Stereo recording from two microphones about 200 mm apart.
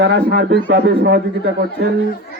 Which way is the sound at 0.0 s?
55° right (ahead or behind).